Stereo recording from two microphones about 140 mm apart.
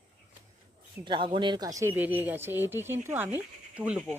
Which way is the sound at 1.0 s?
35° right (ahead or behind).